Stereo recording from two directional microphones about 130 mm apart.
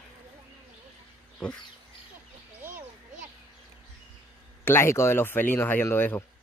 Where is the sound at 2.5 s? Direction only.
15° right (ahead or behind).